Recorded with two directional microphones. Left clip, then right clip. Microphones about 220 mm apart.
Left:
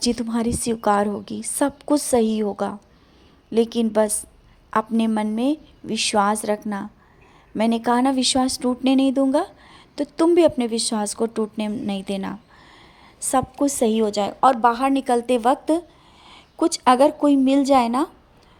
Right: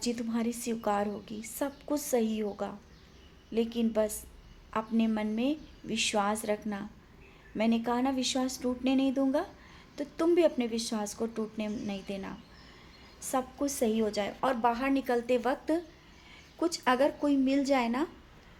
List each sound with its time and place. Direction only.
0.0 s a woman's voice: 35° left (ahead or behind)